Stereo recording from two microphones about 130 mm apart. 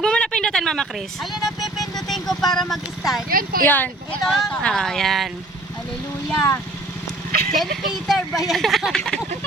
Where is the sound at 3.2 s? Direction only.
90° right.